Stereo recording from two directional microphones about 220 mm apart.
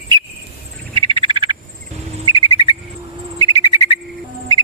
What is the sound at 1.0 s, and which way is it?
Frog, 25° right (ahead or behind).